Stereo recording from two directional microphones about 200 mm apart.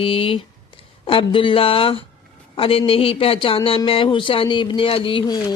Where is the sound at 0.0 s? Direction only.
25° left (ahead or behind).